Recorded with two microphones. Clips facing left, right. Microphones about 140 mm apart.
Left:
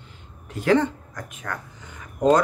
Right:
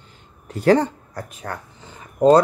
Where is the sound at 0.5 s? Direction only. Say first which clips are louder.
Right 3 dB; 40° right (ahead or behind).